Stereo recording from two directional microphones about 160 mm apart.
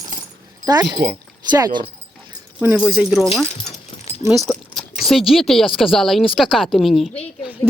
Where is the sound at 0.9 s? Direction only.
90° right.